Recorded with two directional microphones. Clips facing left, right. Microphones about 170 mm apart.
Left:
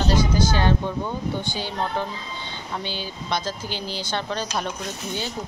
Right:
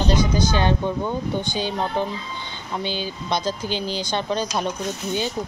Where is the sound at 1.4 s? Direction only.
20° right (ahead or behind).